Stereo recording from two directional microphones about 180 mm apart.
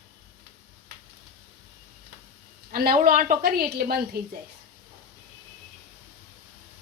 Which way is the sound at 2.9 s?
40° right (ahead or behind).